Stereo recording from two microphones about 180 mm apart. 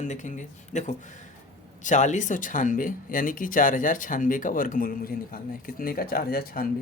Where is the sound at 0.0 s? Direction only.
45° left (ahead or behind).